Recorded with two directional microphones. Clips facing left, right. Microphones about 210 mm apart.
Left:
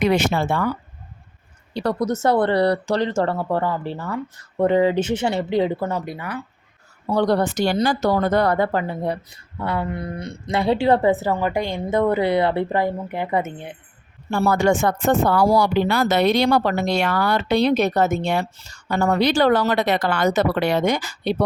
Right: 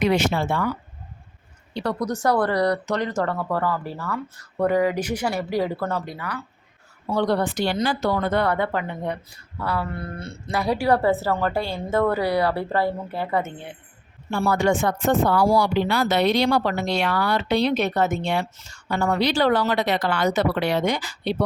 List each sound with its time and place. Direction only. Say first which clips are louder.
0.0 s speech: left 2 dB; 50° left (ahead or behind)
1.7 s speech: left 3 dB; 40° left (ahead or behind)
2.0 s speech: left 2 dB; 25° left (ahead or behind)
7.1 s speech: left 3 dB; 40° left (ahead or behind)
9.6 s a woman's voice: left 2 dB; 20° left (ahead or behind)
14.3 s speech: left 3 dB; 40° left (ahead or behind)